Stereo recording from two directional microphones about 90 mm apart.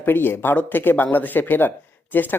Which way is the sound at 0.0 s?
25° left (ahead or behind).